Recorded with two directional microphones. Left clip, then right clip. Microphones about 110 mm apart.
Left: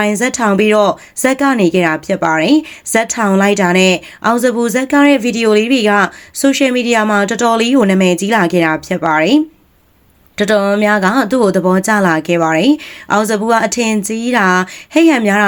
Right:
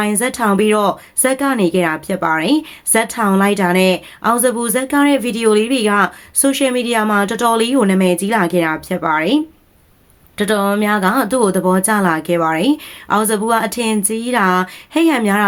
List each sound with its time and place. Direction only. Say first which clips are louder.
0.0 s speech: left 3 dB; 30° left (ahead or behind)